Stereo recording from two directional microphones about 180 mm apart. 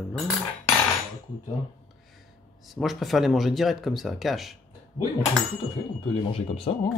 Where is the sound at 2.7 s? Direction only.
Centre (ahead or behind).